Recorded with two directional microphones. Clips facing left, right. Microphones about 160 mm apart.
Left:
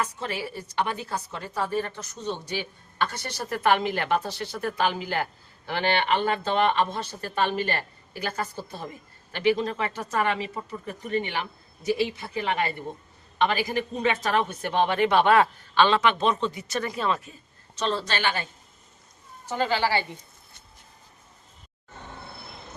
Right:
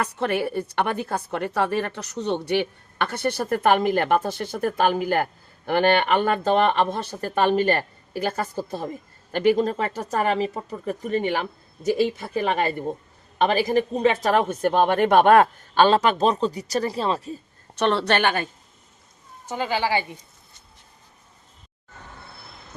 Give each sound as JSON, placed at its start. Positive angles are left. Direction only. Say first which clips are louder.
{"t": 0.0, "sound": "a woman's voice", "louder": "right 7 dB", "side_deg": -65}
{"t": 17.7, "sound": "a woman's voice", "louder": "right 7 dB", "side_deg": -65}
{"t": 19.5, "sound": "speech", "louder": "right 1 dB", "side_deg": -15}